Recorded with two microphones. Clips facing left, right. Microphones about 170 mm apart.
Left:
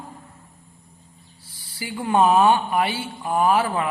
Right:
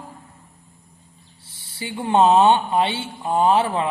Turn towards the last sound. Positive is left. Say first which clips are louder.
# right 2 dB
turn(degrees=-25)  # may be behind; listen again after turning